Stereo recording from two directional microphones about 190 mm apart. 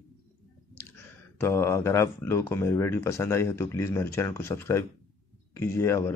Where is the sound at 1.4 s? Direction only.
15° left (ahead or behind).